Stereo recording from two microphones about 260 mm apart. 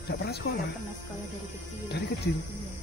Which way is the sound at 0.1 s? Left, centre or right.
Left.